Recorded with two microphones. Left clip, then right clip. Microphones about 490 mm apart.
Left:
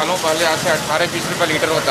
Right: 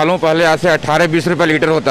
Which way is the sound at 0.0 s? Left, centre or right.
Right.